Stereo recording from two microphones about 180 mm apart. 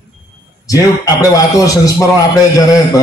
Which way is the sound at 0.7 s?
20° left (ahead or behind).